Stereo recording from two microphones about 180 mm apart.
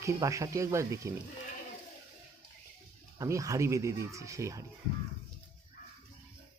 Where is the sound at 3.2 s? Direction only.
15° right (ahead or behind).